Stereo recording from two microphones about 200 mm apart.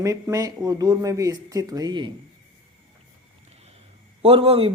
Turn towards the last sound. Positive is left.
turn(degrees=-30)  # may be behind; listen again after turning